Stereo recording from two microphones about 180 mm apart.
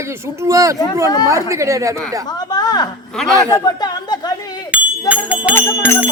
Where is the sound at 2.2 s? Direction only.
20° left (ahead or behind).